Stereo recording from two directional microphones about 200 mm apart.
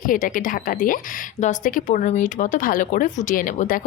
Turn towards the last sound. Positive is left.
turn(degrees=45)  # may be behind; listen again after turning